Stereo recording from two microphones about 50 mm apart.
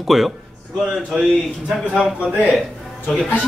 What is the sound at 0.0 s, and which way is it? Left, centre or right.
Speech, centre.